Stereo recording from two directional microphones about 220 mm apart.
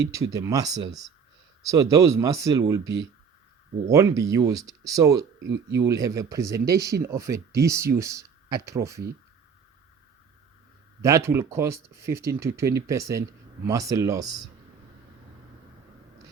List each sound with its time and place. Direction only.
0.1 s speech: 15° right (ahead or behind)
5.4 s speech: 55° right (ahead or behind)
5.9 s speech: 15° right (ahead or behind)
11.0 s speech: 10° right (ahead or behind)